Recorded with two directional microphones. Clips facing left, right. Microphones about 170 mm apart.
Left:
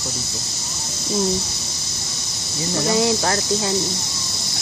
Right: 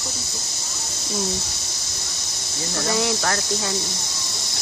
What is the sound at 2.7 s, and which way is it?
Speech, 20° left (ahead or behind).